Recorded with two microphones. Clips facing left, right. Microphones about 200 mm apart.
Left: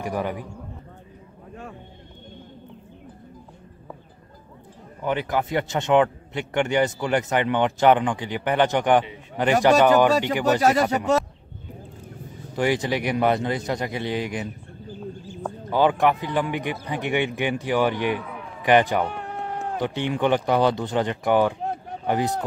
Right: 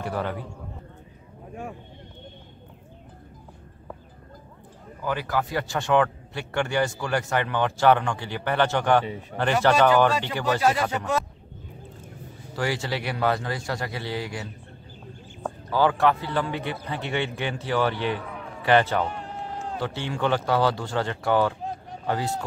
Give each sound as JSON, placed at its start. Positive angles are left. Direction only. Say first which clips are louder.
{"t": 0.0, "sound": "a man's voice", "louder": "left 2 dB", "side_deg": 15}
{"t": 5.0, "sound": "a man's voice", "louder": "left 3 dB", "side_deg": 20}
{"t": 10.6, "sound": "speech", "louder": "left 2 dB", "side_deg": 45}
{"t": 12.5, "sound": "a man's voice", "louder": "left 5 dB", "side_deg": 20}
{"t": 15.7, "sound": "a man's voice", "louder": "left 2 dB", "side_deg": 20}
{"t": 19.0, "sound": "a sound", "louder": "left 3 dB", "side_deg": 60}
{"t": 19.8, "sound": "a man's voice", "louder": "left 4 dB", "side_deg": 15}